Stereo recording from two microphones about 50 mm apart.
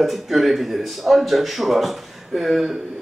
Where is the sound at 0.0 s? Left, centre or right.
Centre.